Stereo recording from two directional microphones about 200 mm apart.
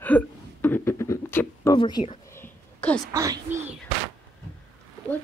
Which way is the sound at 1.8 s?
20° left (ahead or behind).